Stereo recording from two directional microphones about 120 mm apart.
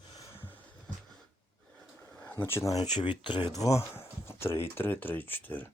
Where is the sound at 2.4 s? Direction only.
20° left (ahead or behind).